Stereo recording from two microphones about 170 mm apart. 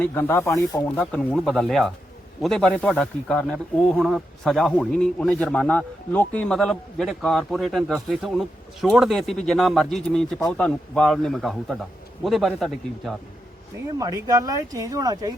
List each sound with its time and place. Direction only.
0.0 s speech: 10° left (ahead or behind)
14.0 s speech: 20° right (ahead or behind)